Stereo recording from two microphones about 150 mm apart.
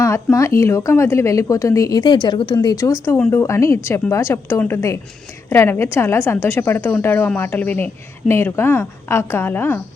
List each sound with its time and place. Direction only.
0.0 s a woman's voice: 20° left (ahead or behind)